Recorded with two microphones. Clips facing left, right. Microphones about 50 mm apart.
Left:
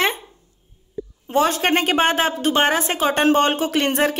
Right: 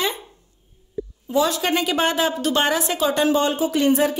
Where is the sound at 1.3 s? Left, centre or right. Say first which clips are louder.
Left 2 dB; left.